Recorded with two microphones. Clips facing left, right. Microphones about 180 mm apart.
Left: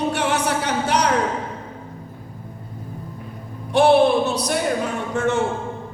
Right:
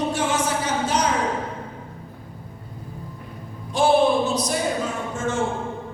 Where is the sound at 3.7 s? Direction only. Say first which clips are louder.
Left 3 dB; 65° left (ahead or behind).